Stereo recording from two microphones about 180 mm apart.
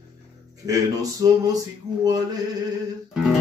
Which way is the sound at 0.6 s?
20° right (ahead or behind).